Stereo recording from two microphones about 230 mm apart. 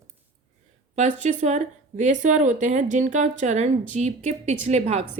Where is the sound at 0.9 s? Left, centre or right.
Right.